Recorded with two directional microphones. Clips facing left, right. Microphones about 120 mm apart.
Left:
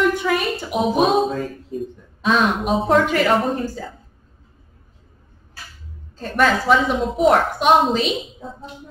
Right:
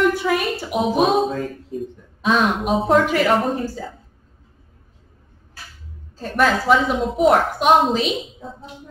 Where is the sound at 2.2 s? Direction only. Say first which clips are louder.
Even; 5° right (ahead or behind).